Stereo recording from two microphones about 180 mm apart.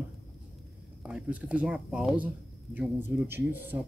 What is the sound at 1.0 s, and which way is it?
Speech, 5° right (ahead or behind).